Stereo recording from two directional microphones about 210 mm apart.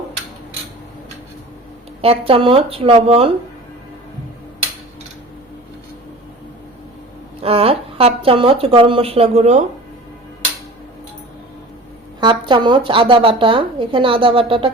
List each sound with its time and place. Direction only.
2.0 s speech: 25° right (ahead or behind)
7.4 s speech: 25° right (ahead or behind)
12.2 s speech: 20° right (ahead or behind)